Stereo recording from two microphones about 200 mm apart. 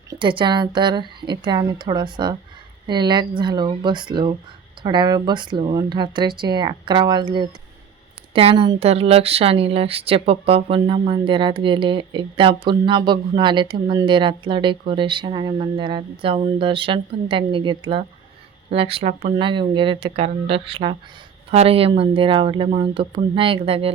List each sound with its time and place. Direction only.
0.1 s speech: 25° right (ahead or behind)